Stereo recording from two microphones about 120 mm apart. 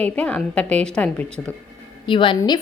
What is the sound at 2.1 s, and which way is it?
Speech, 45° left (ahead or behind).